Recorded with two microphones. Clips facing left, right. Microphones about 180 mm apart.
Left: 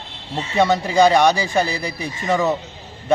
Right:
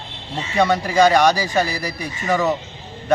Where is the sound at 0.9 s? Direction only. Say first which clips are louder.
Even; centre (ahead or behind).